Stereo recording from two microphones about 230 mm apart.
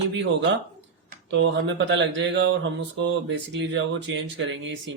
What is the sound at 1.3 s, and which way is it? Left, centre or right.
Mantra, right.